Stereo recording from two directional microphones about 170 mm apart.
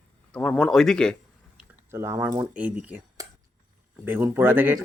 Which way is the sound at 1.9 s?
15° right (ahead or behind).